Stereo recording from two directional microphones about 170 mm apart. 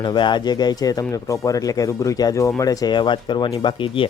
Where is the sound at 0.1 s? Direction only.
25° left (ahead or behind).